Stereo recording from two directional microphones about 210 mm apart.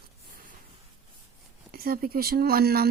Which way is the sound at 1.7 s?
45° right (ahead or behind).